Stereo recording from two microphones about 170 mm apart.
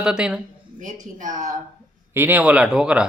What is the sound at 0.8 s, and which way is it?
Speech, 50° right (ahead or behind).